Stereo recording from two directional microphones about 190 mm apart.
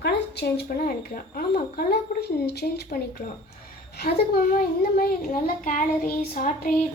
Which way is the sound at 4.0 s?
55° left (ahead or behind).